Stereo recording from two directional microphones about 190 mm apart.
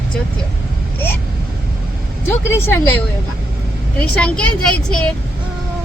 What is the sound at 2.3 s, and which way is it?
Speech, 10° left (ahead or behind).